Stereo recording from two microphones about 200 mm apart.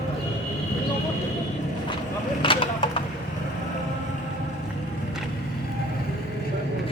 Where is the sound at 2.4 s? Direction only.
25° left (ahead or behind).